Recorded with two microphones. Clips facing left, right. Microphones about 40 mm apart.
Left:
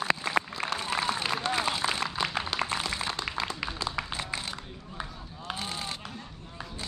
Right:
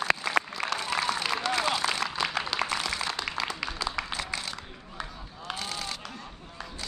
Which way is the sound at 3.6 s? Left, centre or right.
Left.